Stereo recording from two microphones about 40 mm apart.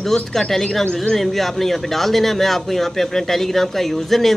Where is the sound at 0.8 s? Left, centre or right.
Left.